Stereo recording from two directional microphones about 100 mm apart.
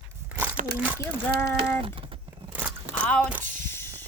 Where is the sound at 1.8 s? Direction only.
65° right (ahead or behind).